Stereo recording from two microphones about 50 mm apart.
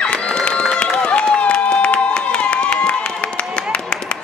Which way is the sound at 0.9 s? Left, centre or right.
Left.